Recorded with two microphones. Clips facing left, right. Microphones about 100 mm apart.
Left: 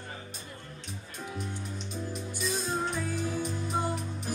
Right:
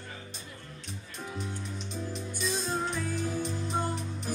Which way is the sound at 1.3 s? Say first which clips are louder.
Even; 5° left (ahead or behind).